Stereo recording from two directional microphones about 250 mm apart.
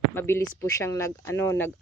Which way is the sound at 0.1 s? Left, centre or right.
Centre.